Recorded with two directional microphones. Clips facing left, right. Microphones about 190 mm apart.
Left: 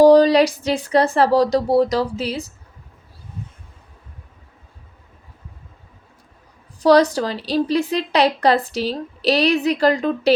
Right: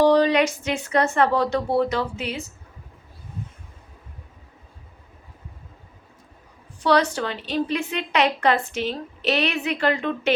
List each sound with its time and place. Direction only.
0.0 s a woman's voice: 35° left (ahead or behind)
6.8 s a woman's voice: 35° left (ahead or behind)